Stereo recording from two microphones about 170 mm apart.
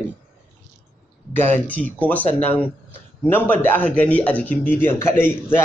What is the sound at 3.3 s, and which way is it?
A man's voice, 10° left (ahead or behind).